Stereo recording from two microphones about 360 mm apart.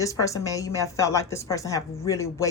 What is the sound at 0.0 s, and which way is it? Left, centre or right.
A woman's voice, centre.